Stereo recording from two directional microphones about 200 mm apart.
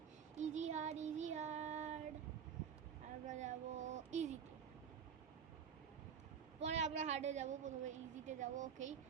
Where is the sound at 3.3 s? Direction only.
35° right (ahead or behind).